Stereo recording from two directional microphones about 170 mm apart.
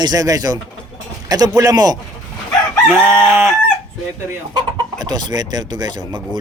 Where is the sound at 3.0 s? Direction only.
10° right (ahead or behind).